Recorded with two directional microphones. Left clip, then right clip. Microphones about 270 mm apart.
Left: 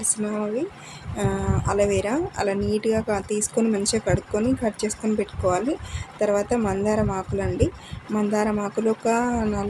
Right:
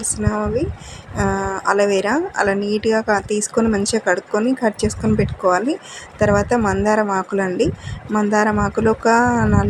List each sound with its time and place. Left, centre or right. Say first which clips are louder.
1.1 s a woman's voice: right 6 dB; centre